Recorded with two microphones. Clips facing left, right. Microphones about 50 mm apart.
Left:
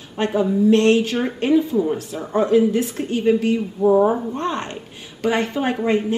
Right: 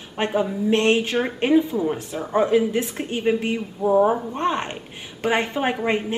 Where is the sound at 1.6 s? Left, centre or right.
Centre.